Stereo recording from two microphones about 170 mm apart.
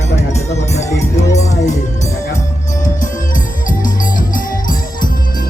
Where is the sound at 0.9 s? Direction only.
20° left (ahead or behind).